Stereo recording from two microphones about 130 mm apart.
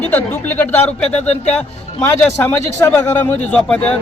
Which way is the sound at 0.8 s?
55° left (ahead or behind).